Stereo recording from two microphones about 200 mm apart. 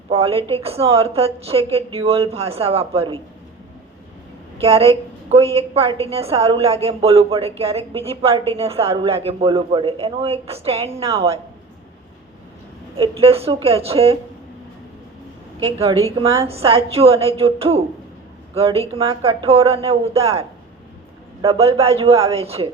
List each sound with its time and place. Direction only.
0.1 s a woman's voice: 30° right (ahead or behind)
4.6 s a woman's voice: 30° right (ahead or behind)
13.0 s a woman's voice: 30° right (ahead or behind)
15.6 s a woman's voice: 30° right (ahead or behind)
21.4 s a woman's voice: 30° right (ahead or behind)